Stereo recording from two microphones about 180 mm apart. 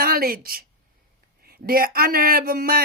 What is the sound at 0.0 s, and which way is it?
A woman's voice, 55° right (ahead or behind).